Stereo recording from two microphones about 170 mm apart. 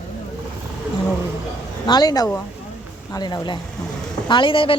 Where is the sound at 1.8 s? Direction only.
25° left (ahead or behind).